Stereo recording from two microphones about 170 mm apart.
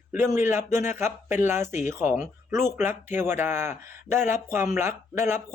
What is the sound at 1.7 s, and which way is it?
Speech, 45° left (ahead or behind).